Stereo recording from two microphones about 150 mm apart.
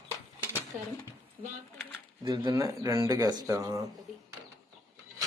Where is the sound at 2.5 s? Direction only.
20° right (ahead or behind).